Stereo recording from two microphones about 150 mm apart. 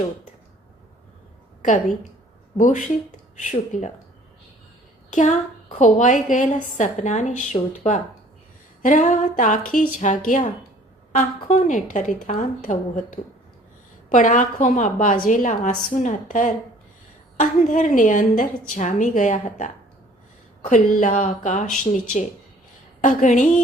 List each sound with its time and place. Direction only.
1.6 s a woman's voice: 60° left (ahead or behind)
5.1 s a woman's voice: 55° left (ahead or behind)
23.0 s a woman's voice: 55° left (ahead or behind)